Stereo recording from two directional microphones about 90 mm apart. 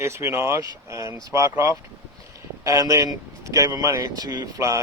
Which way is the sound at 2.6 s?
40° right (ahead or behind).